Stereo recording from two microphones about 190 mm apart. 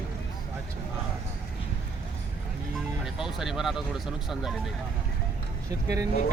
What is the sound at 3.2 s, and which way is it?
Speech, centre (ahead or behind).